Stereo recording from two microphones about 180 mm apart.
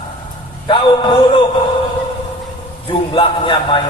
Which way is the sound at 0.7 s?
30° left (ahead or behind).